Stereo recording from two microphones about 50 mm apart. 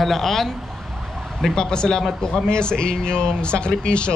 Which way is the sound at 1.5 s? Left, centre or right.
Centre.